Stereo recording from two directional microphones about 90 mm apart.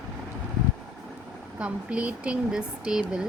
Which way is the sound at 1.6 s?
15° right (ahead or behind).